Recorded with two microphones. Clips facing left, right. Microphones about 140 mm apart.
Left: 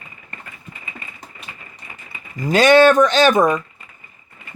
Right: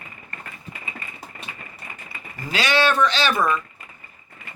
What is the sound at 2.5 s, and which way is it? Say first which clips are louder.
Speech: left 10 dB; 50° left (ahead or behind).